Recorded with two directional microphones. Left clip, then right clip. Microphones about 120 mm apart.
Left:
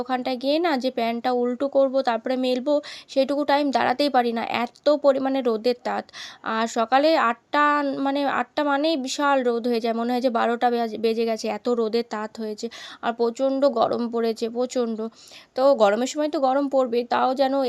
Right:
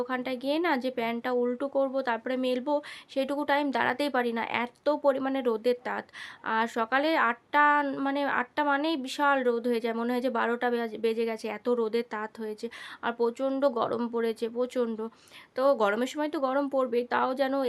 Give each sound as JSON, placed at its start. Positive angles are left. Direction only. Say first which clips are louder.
{"t": 0.0, "sound": "speech", "louder": "left 6 dB", "side_deg": 30}